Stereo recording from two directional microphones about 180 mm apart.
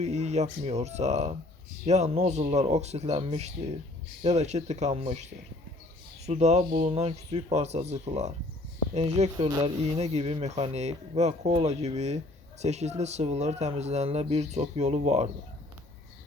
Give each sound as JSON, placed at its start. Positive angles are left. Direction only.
{"t": 0.0, "sound": "speech", "side_deg": -40}
{"t": 9.5, "sound": "speech", "side_deg": -20}
{"t": 10.0, "sound": "speech", "side_deg": -30}